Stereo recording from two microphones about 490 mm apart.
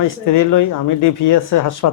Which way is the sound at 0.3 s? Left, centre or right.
Left.